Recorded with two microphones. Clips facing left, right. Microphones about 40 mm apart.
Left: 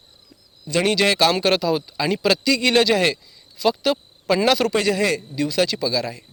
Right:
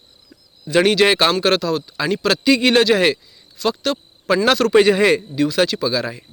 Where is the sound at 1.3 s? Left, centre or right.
Centre.